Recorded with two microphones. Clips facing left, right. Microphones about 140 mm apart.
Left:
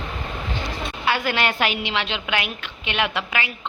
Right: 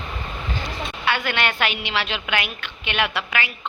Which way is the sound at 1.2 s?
35° left (ahead or behind).